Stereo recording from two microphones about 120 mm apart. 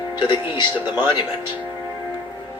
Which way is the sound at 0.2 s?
40° left (ahead or behind).